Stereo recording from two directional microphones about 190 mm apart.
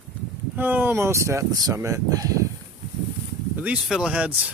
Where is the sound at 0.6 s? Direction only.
10° right (ahead or behind).